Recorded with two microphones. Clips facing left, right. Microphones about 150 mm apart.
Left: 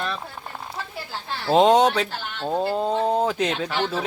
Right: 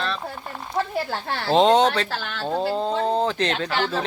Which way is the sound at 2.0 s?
90° right.